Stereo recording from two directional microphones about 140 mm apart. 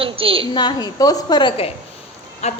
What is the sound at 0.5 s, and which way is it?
A woman's voice, 30° left (ahead or behind).